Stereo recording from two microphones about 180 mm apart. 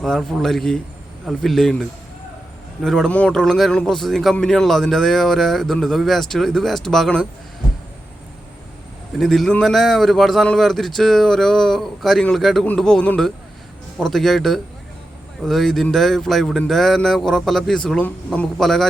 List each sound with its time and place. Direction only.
0.0 s speech: centre (ahead or behind)
9.1 s speech: centre (ahead or behind)